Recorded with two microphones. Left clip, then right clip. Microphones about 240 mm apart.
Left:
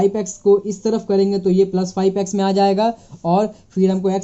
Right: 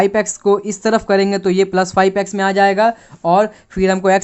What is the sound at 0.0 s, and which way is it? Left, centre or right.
Speech, centre.